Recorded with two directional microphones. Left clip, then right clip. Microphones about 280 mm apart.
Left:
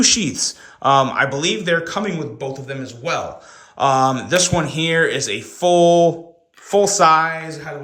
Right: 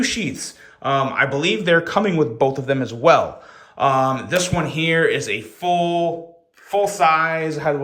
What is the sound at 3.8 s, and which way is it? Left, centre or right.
Speech, centre.